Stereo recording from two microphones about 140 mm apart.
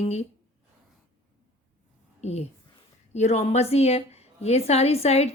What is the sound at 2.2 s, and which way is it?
Speech, 50° left (ahead or behind).